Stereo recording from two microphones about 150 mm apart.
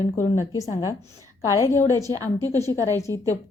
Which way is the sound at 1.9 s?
20° left (ahead or behind).